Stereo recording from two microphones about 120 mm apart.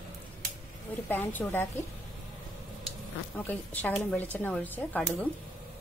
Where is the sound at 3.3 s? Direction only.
15° left (ahead or behind).